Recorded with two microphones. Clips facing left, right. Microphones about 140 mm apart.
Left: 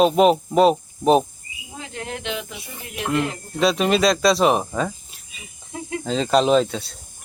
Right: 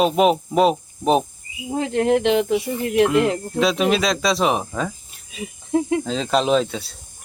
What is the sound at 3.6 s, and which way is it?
Speech, centre (ahead or behind).